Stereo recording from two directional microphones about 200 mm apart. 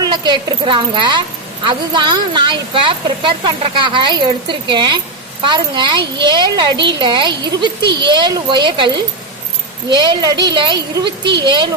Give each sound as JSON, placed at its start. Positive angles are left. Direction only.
{"t": 0.0, "sound": "speech", "side_deg": -20}
{"t": 9.9, "sound": "speech", "side_deg": -20}